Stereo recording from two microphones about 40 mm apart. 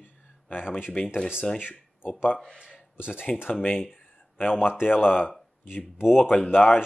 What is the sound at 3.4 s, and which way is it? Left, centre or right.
Speech, left.